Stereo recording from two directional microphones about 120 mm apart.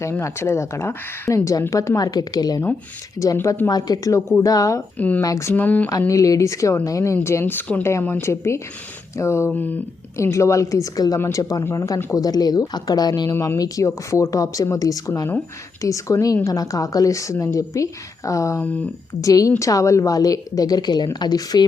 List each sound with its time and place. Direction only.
0.0 s speech: 25° left (ahead or behind)
3.3 s speech: 20° left (ahead or behind)
4.9 s speech: 15° left (ahead or behind)
5.2 s speech: 25° left (ahead or behind)
6.0 s a woman's voice: 25° left (ahead or behind)
13.3 s speech: 20° left (ahead or behind)
18.6 s speech: 10° left (ahead or behind)
19.2 s a woman's voice: 30° left (ahead or behind)